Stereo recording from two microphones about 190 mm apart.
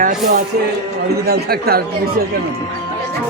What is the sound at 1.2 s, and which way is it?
Speech, 55° right (ahead or behind).